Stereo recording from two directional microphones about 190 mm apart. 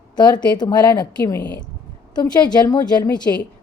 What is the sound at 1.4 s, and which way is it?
Speech, 60° left (ahead or behind).